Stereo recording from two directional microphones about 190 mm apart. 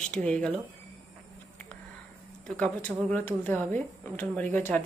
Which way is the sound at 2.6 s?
10° left (ahead or behind).